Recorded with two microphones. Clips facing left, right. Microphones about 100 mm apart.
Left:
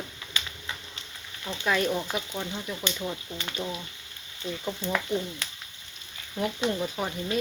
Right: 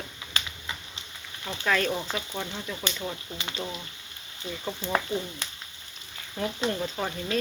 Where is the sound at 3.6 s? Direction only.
25° right (ahead or behind).